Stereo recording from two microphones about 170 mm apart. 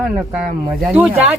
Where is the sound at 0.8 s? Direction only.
10° right (ahead or behind).